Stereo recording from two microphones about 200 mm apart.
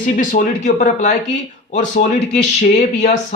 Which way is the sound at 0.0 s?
40° left (ahead or behind).